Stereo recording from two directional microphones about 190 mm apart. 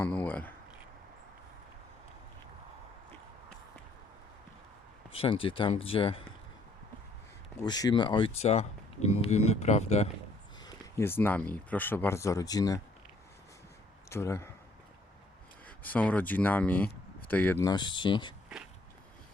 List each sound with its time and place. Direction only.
0.0 s a sound: 10° left (ahead or behind)
5.1 s speech: 30° left (ahead or behind)
7.6 s speech: 20° left (ahead or behind)
10.6 s speech: 15° left (ahead or behind)
14.1 s speech: 15° left (ahead or behind)
15.6 s speech: 10° left (ahead or behind); by 18.3 s 25° left (ahead or behind)